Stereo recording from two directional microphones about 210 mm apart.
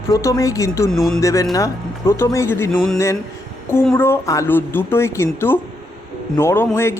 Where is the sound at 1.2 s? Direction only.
15° left (ahead or behind).